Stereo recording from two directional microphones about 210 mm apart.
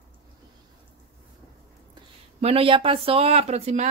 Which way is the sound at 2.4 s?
25° right (ahead or behind).